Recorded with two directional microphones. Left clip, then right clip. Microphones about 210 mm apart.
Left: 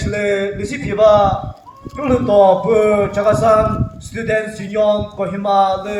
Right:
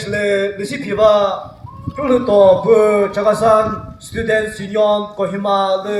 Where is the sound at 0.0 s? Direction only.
45° right (ahead or behind).